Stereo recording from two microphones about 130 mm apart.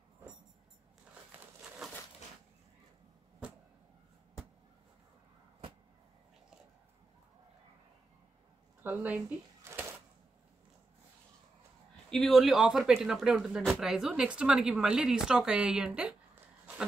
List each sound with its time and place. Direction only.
1.4 s crumpling: 5° right (ahead or behind)
8.8 s speech: 15° right (ahead or behind)
9.6 s a sound: 20° right (ahead or behind)
12.1 s speech: centre (ahead or behind)